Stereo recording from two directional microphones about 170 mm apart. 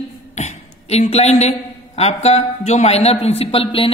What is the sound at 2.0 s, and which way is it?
A woman's voice, 40° left (ahead or behind).